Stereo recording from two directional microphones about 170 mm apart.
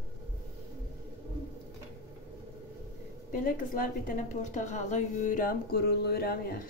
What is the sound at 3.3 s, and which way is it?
A woman's voice, 55° left (ahead or behind).